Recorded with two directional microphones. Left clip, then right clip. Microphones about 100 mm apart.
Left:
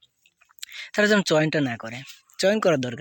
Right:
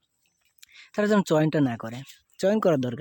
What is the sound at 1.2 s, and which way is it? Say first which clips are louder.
Speech: left 2 dB; 40° right (ahead or behind).